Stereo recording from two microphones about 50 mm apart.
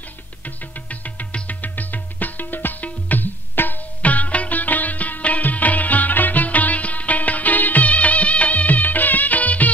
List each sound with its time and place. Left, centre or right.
0.8 s music: left